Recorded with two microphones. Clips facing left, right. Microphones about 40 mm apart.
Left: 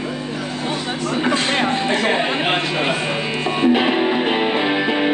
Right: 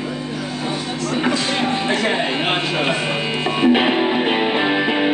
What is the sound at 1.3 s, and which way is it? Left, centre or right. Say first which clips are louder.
Music: left 2 dB; left.